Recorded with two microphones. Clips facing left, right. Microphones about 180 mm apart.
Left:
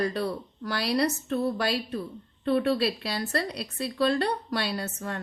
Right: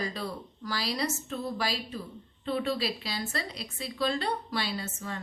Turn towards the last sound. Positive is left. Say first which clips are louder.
# left 4 dB
turn(degrees=65)  # may be behind; listen again after turning